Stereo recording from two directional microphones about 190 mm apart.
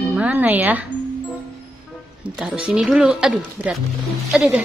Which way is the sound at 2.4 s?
5° right (ahead or behind).